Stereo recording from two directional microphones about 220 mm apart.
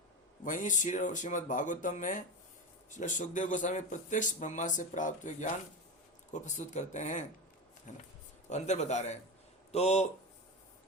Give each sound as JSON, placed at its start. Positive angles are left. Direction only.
{"t": 0.4, "sound": "speech", "side_deg": 35}